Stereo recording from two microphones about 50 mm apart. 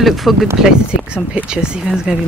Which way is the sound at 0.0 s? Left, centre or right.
Centre.